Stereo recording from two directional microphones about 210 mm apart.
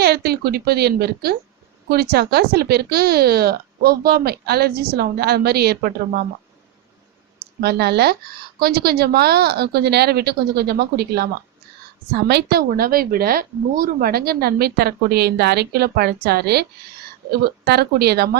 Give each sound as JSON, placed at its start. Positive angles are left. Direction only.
{"t": 0.0, "sound": "a woman's voice", "side_deg": -50}
{"t": 7.3, "sound": "speech", "side_deg": -50}
{"t": 12.3, "sound": "speech", "side_deg": -50}